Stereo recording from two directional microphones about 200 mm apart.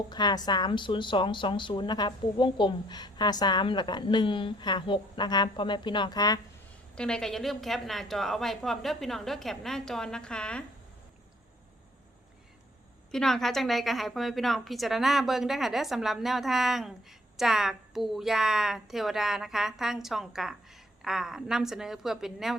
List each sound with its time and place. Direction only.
0.1 s speech: 20° left (ahead or behind)
6.9 s a woman's voice: 5° left (ahead or behind)
13.1 s a woman's voice: centre (ahead or behind)